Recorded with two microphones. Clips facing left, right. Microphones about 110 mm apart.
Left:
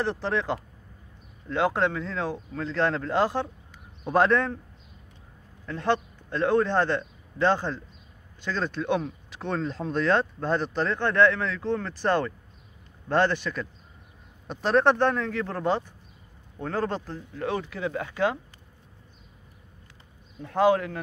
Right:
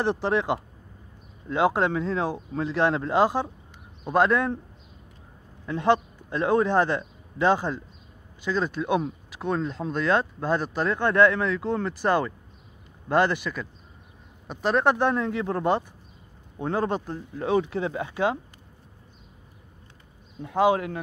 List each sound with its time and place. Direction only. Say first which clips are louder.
0.0 s speech: right 3 dB; 20° right (ahead or behind)
4.0 s speech: even; centre (ahead or behind)
5.7 s a man's voice: right 4 dB; 15° right (ahead or behind)
20.4 s speech: even; 15° right (ahead or behind)